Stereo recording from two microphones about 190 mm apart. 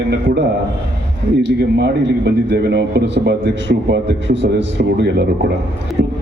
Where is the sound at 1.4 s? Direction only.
65° right (ahead or behind).